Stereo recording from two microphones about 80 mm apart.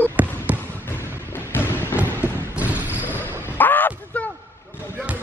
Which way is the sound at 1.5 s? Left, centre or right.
Left.